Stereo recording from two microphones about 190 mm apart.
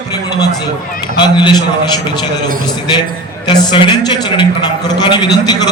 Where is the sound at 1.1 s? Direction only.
25° left (ahead or behind).